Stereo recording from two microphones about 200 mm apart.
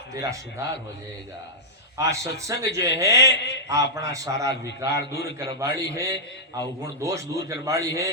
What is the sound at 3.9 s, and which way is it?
A man's voice, 15° right (ahead or behind).